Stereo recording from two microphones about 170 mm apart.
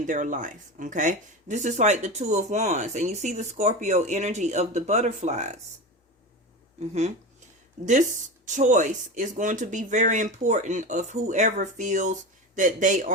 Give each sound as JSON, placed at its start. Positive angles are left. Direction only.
{"t": 0.0, "sound": "speech", "side_deg": -45}
{"t": 6.7, "sound": "speech", "side_deg": -40}